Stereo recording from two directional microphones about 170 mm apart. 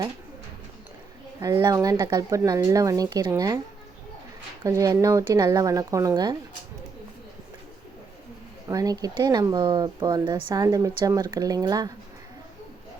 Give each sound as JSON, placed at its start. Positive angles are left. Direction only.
{"t": 1.4, "sound": "speech", "side_deg": -25}
{"t": 4.6, "sound": "speech", "side_deg": -20}
{"t": 8.6, "sound": "speech", "side_deg": -20}